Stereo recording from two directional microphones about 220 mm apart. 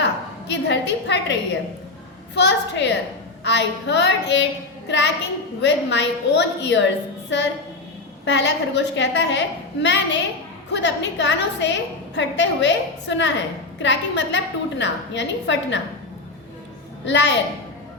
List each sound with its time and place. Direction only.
0.0 s a woman's voice: 55° left (ahead or behind)
17.1 s a woman's voice: 55° left (ahead or behind)